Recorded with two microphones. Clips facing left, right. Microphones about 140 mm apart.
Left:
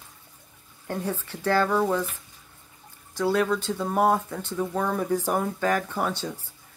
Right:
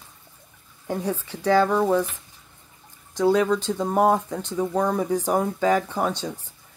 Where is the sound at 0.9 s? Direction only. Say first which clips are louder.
Right 3 dB; 10° right (ahead or behind).